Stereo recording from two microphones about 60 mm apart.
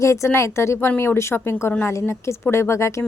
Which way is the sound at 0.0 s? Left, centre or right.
Left.